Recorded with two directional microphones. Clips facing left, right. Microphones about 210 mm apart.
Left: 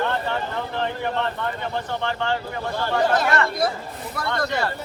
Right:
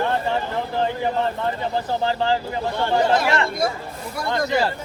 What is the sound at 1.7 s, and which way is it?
Speech, 35° right (ahead or behind).